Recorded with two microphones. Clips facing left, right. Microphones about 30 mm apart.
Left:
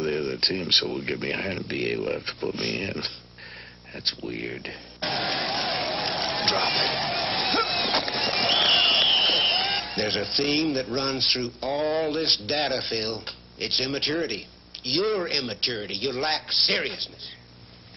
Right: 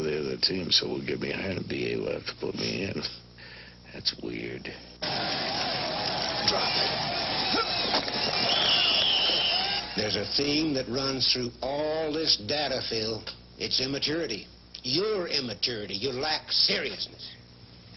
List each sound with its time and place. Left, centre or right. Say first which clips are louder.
0.0 s a sound: left 3 dB; centre
1.2 s speech: left 3 dB; centre
2.0 s speech: left 3 dB; centre
2.5 s a man's voice: left 1 dB; centre
4.6 s a sound: left 3 dB; centre
6.8 s speech: left 3 dB; centre
7.3 s a sound: left 3 dB; centre
9.3 s a man's voice: left 4 dB; centre
12.0 s music: left 3 dB; centre
12.3 s a man's voice: left 3 dB; centre